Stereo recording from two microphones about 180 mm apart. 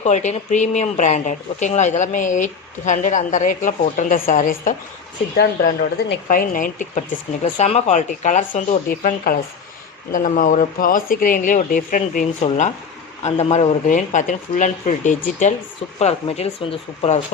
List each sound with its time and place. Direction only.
0.0 s speech: 40° left (ahead or behind)
5.4 s speech: 65° left (ahead or behind)
6.2 s speech: 50° left (ahead or behind)
12.4 s speech: 35° left (ahead or behind)
13.8 s speech: 45° left (ahead or behind)